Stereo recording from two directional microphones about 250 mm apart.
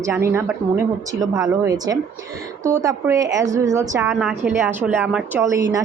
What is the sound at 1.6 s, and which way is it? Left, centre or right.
A woman's voice, centre.